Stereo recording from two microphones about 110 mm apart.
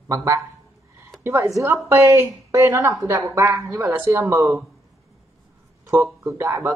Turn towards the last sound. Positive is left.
turn(degrees=-25)  # may be behind; listen again after turning